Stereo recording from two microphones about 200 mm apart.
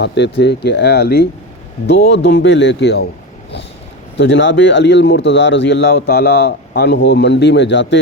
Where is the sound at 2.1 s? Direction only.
65° left (ahead or behind).